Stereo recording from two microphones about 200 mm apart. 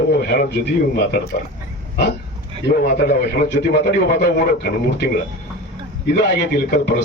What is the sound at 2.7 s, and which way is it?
Speech, 50° left (ahead or behind).